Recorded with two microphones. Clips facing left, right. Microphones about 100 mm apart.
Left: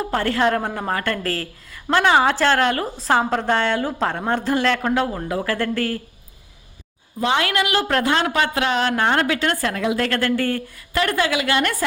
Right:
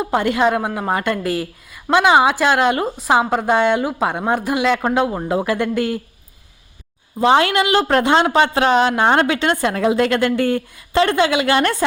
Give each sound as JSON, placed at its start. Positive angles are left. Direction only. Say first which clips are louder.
{"t": 0.0, "sound": "a woman's voice", "louder": "right 3 dB", "side_deg": -15}
{"t": 5.1, "sound": "a woman's voice", "louder": "right 4 dB", "side_deg": -25}
{"t": 7.2, "sound": "a woman's voice", "louder": "right 6 dB", "side_deg": -30}
{"t": 9.7, "sound": "a woman's voice", "louder": "right 5 dB", "side_deg": -30}
{"t": 10.0, "sound": "a woman's voice", "louder": "right 4 dB", "side_deg": -20}